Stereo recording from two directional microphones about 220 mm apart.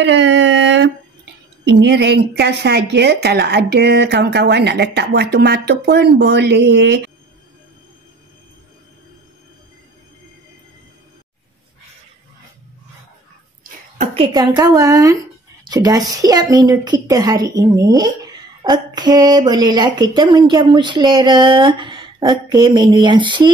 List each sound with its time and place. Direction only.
0.0 s a sound: 55° right (ahead or behind)
1.6 s speech: 50° right (ahead or behind)
13.9 s a woman's voice: 25° right (ahead or behind)